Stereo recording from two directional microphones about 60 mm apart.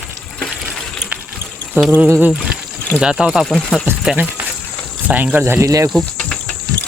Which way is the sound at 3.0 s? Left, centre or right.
Centre.